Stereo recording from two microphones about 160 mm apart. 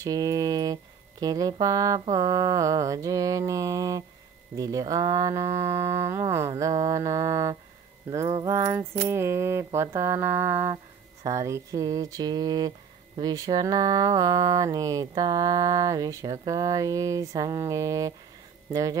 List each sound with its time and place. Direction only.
0.0 s speech: 20° right (ahead or behind)
8.3 s speech: 30° right (ahead or behind)
8.5 s mantra: 15° right (ahead or behind)
11.2 s speech: 20° right (ahead or behind)